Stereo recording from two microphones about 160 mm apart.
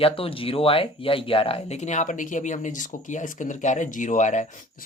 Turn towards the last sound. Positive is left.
turn(degrees=50)  # may be behind; listen again after turning